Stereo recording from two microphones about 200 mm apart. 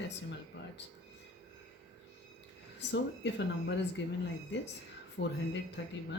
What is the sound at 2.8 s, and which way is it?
Speech, 60° left (ahead or behind).